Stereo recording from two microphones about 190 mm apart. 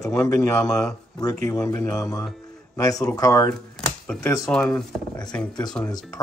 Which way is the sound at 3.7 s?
5° left (ahead or behind).